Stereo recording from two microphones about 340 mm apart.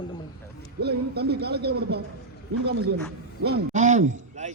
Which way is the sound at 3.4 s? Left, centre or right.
Right.